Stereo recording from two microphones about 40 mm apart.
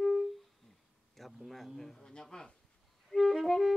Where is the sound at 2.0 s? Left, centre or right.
Centre.